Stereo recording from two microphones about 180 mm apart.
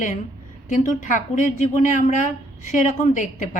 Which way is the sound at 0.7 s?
45° left (ahead or behind).